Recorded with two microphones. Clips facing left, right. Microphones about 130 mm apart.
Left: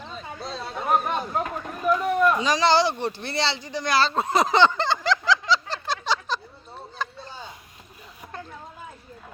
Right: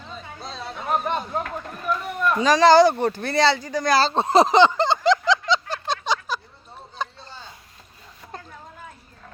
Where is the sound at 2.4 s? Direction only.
45° right (ahead or behind).